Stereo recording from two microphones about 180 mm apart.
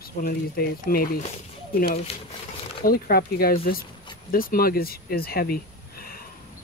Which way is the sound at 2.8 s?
55° left (ahead or behind).